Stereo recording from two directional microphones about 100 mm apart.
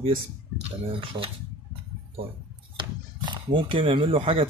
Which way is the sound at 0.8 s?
65° right (ahead or behind).